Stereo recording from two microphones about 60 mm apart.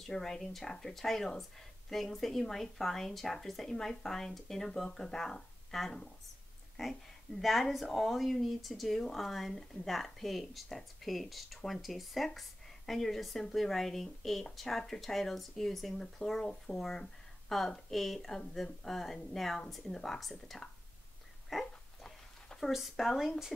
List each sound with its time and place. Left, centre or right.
0.0 s speech: centre
21.5 s dog: centre
22.6 s speech: centre